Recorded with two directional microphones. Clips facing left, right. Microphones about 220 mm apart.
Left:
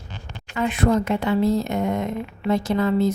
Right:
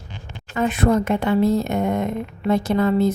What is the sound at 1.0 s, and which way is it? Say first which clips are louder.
A woman's voice: right 2 dB; 55° right (ahead or behind).